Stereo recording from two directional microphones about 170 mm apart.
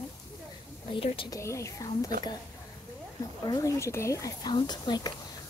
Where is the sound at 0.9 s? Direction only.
30° left (ahead or behind).